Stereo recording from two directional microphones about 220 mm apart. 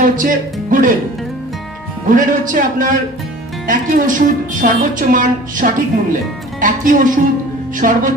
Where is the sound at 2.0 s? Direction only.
35° right (ahead or behind).